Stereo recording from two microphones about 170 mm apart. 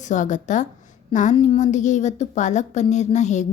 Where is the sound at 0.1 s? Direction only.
45° left (ahead or behind).